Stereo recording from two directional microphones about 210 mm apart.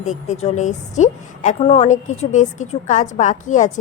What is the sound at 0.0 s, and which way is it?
A woman's voice, 35° left (ahead or behind).